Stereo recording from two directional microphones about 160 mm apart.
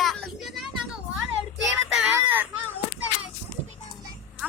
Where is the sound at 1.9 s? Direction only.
5° right (ahead or behind).